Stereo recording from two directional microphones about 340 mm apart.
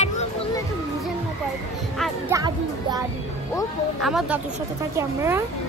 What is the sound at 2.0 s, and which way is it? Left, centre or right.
Music, centre.